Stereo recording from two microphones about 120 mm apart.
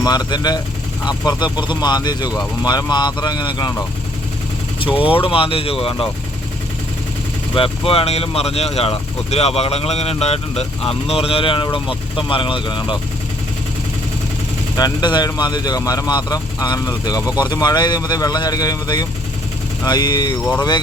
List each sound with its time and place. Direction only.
0.0 s speech: 35° left (ahead or behind)
4.9 s speech: 50° left (ahead or behind)
7.5 s speech: 50° left (ahead or behind)
14.8 s speech: 35° left (ahead or behind)